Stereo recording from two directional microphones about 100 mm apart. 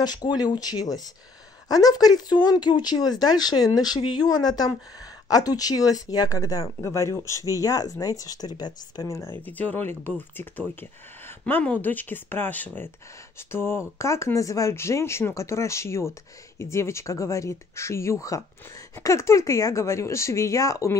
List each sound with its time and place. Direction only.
0.0 s speech: 45° left (ahead or behind)
9.1 s speech: 25° left (ahead or behind)